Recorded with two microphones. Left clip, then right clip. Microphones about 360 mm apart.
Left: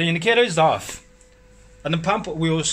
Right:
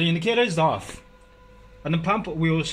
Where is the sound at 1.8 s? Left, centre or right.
Left.